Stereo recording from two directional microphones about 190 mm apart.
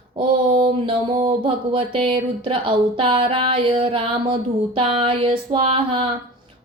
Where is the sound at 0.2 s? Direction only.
25° right (ahead or behind).